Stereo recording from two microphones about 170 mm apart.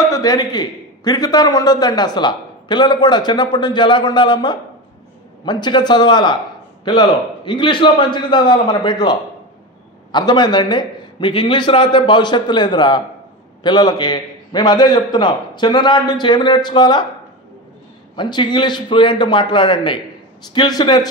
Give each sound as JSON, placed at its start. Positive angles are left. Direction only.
{"t": 0.1, "sound": "a man's voice", "side_deg": 20}
{"t": 18.1, "sound": "a man's voice", "side_deg": 25}